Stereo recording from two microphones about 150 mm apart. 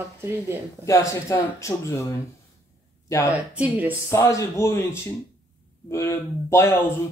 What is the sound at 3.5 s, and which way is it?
Speech, 10° right (ahead or behind).